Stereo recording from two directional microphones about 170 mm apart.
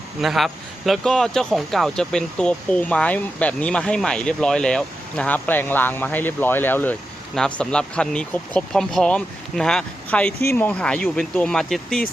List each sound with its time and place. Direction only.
0.2 s a man's voice: centre (ahead or behind)